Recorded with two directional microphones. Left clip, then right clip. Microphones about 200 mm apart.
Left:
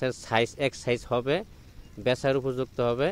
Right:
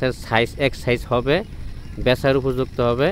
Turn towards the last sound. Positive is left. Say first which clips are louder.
# right 7 dB
turn(degrees=35)  # may be behind; listen again after turning